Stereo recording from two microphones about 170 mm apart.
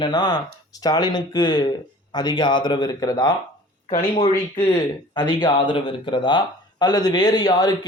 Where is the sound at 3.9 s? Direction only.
35° left (ahead or behind).